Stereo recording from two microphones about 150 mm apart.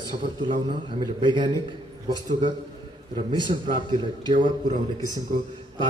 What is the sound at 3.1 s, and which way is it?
A man's voice, 30° right (ahead or behind).